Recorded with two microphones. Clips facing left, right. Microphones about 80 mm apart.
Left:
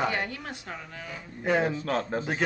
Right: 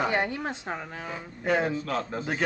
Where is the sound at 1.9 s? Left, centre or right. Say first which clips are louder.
Left 2 dB; left.